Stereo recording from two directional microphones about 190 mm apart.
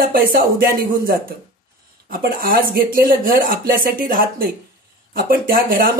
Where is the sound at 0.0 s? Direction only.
50° right (ahead or behind).